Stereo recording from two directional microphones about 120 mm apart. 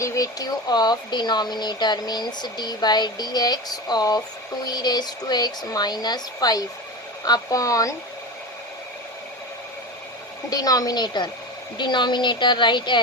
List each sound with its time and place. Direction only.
0.0 s speech: 25° left (ahead or behind)
10.5 s speech: 30° left (ahead or behind)